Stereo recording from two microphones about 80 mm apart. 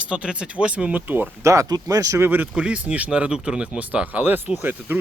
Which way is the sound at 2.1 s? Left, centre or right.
Right.